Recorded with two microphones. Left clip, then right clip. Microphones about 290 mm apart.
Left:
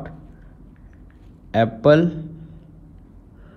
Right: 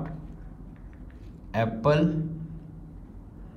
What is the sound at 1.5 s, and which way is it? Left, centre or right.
Speech, left.